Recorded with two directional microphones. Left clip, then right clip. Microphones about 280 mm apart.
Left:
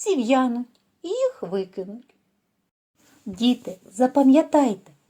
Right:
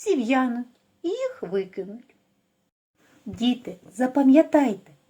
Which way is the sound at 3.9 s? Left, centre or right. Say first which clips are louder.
Left 1 dB; centre.